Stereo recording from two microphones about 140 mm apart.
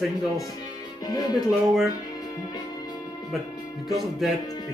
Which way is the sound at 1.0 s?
30° left (ahead or behind).